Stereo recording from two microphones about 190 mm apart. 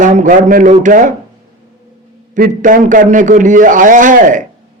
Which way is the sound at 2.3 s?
40° right (ahead or behind).